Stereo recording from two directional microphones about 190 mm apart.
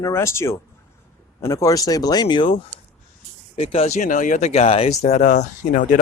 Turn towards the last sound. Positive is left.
turn(degrees=40)  # may be behind; listen again after turning